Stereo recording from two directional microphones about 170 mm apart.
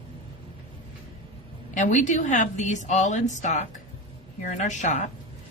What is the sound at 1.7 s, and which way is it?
A woman's voice, 45° left (ahead or behind).